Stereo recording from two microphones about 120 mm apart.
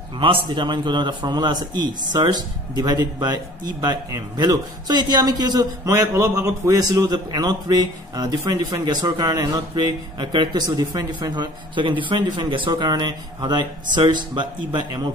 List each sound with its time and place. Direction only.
0.2 s a man's voice: 45° right (ahead or behind)